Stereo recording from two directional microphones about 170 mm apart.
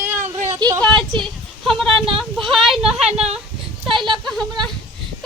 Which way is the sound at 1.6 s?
Centre (ahead or behind).